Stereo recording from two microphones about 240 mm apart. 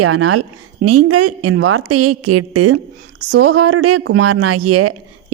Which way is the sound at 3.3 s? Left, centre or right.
Right.